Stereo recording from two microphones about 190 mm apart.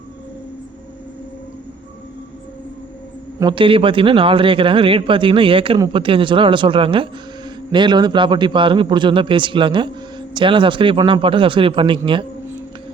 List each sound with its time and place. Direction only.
3.4 s a man's voice: 25° right (ahead or behind)